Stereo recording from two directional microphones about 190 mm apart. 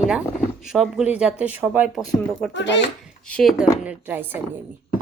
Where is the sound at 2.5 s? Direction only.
70° left (ahead or behind).